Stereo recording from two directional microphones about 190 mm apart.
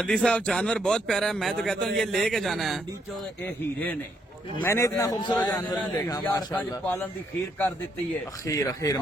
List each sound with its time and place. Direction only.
0.0 s a man's voice: 5° left (ahead or behind)
4.6 s a man's voice: 15° left (ahead or behind)
6.8 s speech: 10° left (ahead or behind)
8.4 s speech: 15° left (ahead or behind)